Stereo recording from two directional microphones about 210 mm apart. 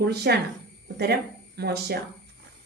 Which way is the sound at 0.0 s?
50° right (ahead or behind).